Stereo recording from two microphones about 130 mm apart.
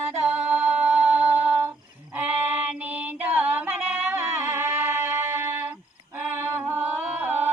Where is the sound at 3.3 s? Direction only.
10° right (ahead or behind).